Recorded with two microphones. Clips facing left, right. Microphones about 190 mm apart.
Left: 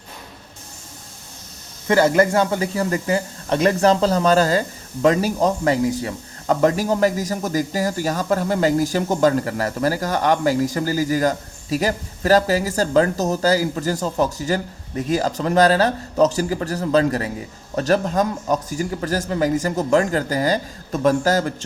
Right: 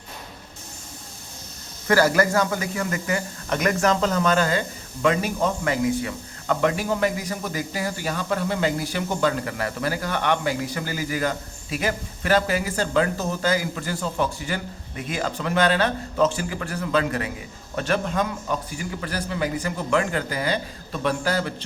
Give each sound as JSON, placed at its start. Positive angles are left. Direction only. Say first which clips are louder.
{"t": 1.9, "sound": "a man's voice", "louder": "left 3 dB", "side_deg": 25}